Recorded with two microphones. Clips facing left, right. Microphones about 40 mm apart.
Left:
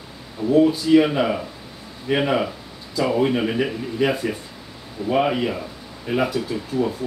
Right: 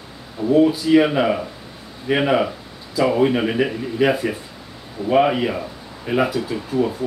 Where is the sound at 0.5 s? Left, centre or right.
Centre.